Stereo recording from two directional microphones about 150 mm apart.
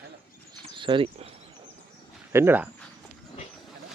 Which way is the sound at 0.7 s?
35° right (ahead or behind).